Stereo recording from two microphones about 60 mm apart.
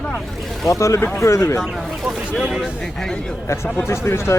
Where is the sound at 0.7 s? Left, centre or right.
Left.